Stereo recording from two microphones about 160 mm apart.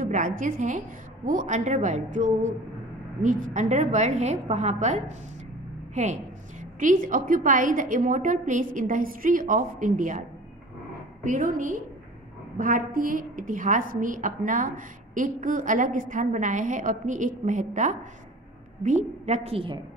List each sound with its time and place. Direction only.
0.0 s a woman's voice: 55° right (ahead or behind)
11.2 s a woman's voice: 55° right (ahead or behind); by 19.8 s 35° right (ahead or behind)